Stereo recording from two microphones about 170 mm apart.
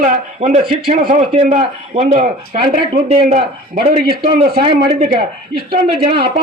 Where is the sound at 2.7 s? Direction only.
55° right (ahead or behind).